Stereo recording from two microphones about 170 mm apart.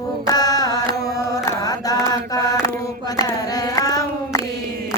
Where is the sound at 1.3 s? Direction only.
20° left (ahead or behind).